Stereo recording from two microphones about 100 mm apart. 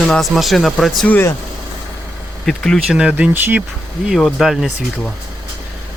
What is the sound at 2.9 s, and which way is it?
Speech, 10° right (ahead or behind).